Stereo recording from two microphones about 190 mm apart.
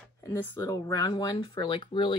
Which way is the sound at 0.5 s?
15° left (ahead or behind).